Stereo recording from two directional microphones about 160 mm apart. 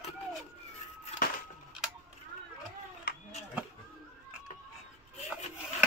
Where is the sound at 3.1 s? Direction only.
70° left (ahead or behind).